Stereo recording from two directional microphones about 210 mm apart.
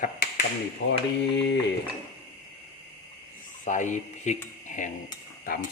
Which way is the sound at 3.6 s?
35° left (ahead or behind).